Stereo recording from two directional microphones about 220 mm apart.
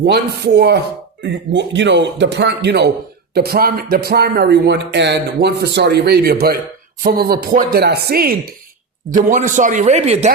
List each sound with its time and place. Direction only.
0.0 s a man's voice: 50° right (ahead or behind); by 10.3 s 30° right (ahead or behind)